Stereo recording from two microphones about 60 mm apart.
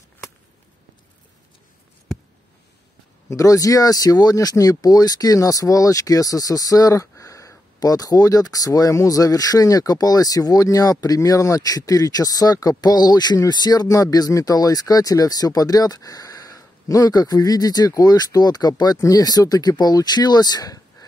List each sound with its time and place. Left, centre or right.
3.3 s speech: left